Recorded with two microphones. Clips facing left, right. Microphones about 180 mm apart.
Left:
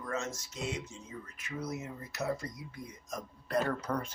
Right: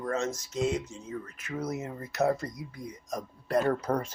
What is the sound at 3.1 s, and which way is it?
Speech, 35° right (ahead or behind).